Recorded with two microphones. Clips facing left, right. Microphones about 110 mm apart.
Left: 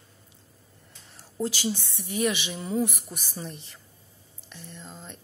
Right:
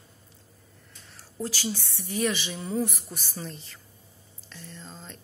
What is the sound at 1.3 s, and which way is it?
A woman's voice, 15° left (ahead or behind).